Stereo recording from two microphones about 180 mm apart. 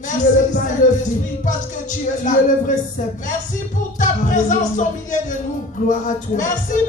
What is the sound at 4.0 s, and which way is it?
Music, 45° left (ahead or behind).